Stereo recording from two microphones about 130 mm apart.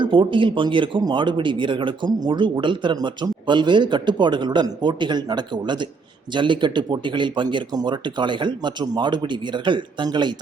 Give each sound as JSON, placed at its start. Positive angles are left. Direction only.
{"t": 0.0, "sound": "speech", "side_deg": -40}